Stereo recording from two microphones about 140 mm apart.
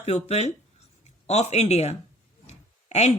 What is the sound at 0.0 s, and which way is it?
Speech, 50° left (ahead or behind).